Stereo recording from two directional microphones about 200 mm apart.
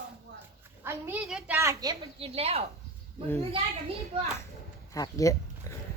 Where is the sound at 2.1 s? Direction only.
30° right (ahead or behind).